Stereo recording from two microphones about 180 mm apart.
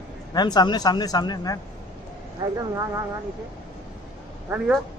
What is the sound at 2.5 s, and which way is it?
Speech, 20° right (ahead or behind).